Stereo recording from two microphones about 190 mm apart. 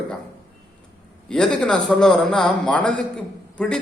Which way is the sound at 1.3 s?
5° left (ahead or behind).